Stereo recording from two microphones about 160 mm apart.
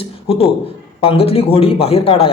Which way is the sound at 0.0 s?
40° left (ahead or behind).